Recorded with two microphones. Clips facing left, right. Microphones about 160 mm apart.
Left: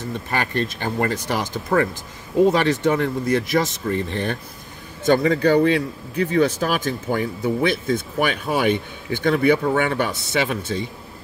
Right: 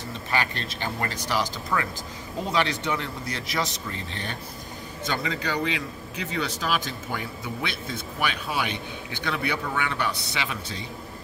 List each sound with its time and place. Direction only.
0.1 s speech: 50° left (ahead or behind)